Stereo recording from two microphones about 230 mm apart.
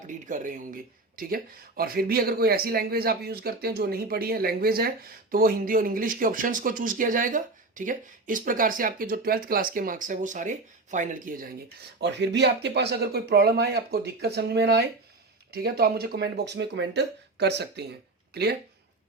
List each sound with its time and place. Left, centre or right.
0.3 s speech: right
11.9 s speech: right